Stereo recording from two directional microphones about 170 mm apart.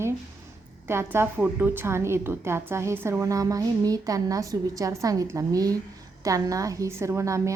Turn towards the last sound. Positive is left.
turn(degrees=-15)  # may be behind; listen again after turning